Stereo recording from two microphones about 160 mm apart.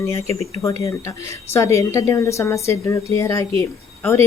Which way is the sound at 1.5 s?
20° left (ahead or behind).